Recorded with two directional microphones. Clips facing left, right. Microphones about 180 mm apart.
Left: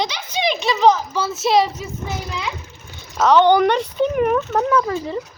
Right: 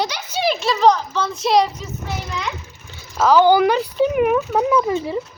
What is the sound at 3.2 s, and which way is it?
A child's voice, 5° right (ahead or behind).